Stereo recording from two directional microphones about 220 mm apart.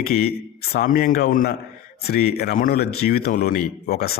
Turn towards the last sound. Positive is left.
turn(degrees=40)  # may be behind; listen again after turning